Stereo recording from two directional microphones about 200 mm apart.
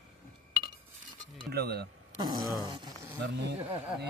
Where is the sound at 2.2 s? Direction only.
20° right (ahead or behind).